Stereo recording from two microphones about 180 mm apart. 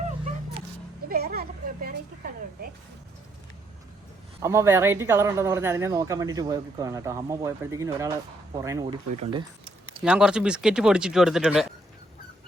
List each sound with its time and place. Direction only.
1.0 s a sound: 60° right (ahead or behind)
4.4 s speech: 15° right (ahead or behind)
10.0 s speech: 5° right (ahead or behind)